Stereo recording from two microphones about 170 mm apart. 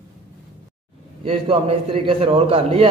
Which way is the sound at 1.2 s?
35° right (ahead or behind).